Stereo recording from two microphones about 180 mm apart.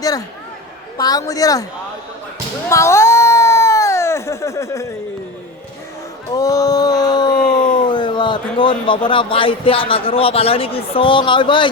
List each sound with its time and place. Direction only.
0.9 s a woman's voice: 20° left (ahead or behind)
2.6 s a sound: 15° left (ahead or behind)
6.3 s speech: 20° left (ahead or behind)